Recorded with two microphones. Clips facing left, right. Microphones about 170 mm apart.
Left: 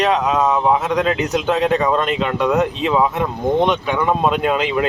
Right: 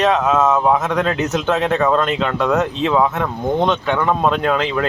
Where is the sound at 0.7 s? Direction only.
10° left (ahead or behind).